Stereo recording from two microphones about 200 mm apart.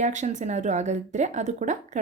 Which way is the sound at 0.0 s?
35° right (ahead or behind).